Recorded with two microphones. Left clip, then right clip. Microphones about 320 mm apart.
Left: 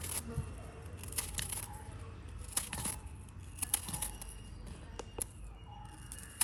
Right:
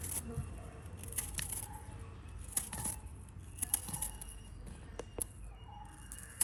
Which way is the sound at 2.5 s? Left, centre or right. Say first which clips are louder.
Left 3 dB; centre.